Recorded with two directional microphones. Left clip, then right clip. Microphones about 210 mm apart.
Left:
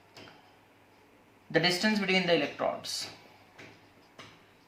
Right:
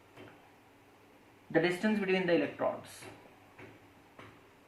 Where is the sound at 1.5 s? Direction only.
35° left (ahead or behind).